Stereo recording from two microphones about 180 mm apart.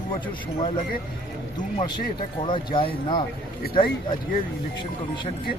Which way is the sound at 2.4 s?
25° left (ahead or behind).